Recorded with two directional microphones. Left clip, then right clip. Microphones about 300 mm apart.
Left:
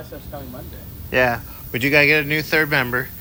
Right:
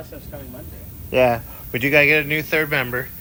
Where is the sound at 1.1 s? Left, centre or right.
Centre.